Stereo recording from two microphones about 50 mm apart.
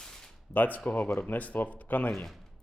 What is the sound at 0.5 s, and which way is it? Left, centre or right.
A man's voice, left.